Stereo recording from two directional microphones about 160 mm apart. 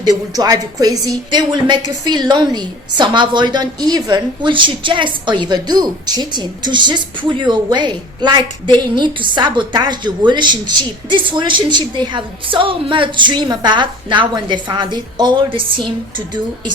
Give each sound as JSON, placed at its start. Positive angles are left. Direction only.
{"t": 0.0, "sound": "a woman's voice", "side_deg": -25}